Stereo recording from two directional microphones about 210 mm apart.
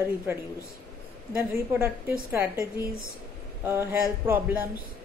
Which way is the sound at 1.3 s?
10° right (ahead or behind).